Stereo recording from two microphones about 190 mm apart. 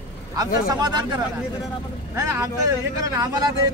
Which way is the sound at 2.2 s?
15° right (ahead or behind).